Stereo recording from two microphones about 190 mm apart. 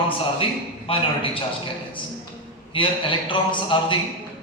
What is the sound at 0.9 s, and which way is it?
Speech, 30° left (ahead or behind).